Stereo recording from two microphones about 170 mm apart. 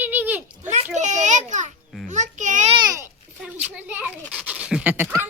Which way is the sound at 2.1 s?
45° right (ahead or behind).